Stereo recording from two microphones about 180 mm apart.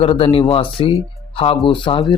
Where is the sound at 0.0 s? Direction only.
35° left (ahead or behind).